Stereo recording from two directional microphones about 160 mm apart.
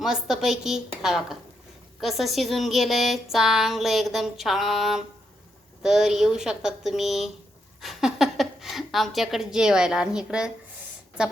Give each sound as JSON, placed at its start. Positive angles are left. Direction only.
{"t": 0.0, "sound": "a woman's voice", "side_deg": -5}